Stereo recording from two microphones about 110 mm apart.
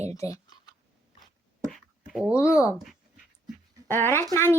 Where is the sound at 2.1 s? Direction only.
5° right (ahead or behind).